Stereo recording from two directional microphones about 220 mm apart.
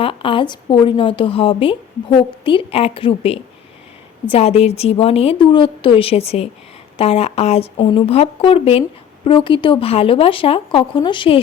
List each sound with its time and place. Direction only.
0.0 s a woman's voice: 25° left (ahead or behind)